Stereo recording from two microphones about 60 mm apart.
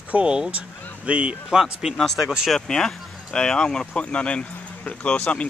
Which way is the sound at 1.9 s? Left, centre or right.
Centre.